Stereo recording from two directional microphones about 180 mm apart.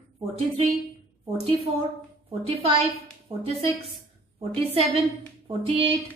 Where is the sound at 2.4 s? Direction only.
30° right (ahead or behind).